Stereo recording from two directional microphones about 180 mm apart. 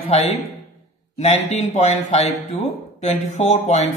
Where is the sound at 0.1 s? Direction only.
35° left (ahead or behind).